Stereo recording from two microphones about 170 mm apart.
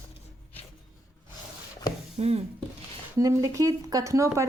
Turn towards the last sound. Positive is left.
turn(degrees=-20)  # may be behind; listen again after turning